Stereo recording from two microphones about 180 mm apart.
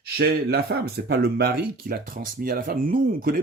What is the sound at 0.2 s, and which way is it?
Speech, 60° right (ahead or behind).